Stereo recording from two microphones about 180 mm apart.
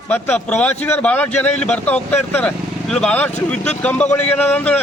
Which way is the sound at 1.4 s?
40° left (ahead or behind).